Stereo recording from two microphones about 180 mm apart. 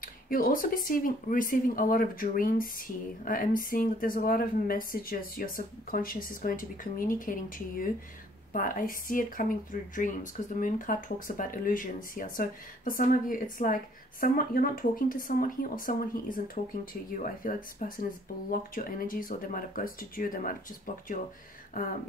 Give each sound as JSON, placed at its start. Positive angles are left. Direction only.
{"t": 0.0, "sound": "speech", "side_deg": 50}